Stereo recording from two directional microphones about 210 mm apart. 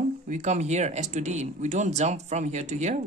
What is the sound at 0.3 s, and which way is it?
Speech, 35° right (ahead or behind).